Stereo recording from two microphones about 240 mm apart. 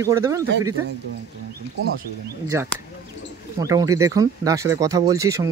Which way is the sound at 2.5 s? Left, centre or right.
Centre.